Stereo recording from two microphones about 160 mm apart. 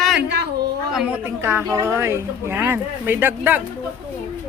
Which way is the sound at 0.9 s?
10° right (ahead or behind).